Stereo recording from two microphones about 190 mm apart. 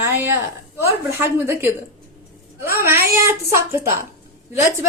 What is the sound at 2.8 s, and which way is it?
A woman's voice, 15° right (ahead or behind).